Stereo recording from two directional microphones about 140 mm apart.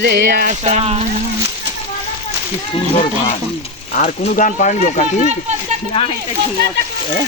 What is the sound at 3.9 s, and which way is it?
Speech, 65° left (ahead or behind).